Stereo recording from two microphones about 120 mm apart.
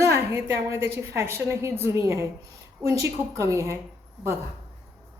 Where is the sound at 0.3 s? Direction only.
20° right (ahead or behind).